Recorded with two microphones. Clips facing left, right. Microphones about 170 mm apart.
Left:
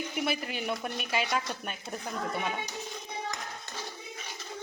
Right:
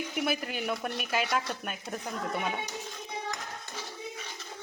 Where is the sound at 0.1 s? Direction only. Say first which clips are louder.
Right 1 dB; centre (ahead or behind).